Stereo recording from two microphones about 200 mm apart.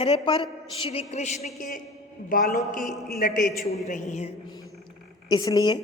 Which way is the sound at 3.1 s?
45° left (ahead or behind).